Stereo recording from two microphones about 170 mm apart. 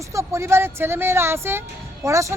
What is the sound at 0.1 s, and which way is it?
Speech, 15° right (ahead or behind).